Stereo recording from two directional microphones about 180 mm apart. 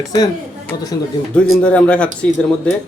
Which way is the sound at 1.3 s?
5° left (ahead or behind).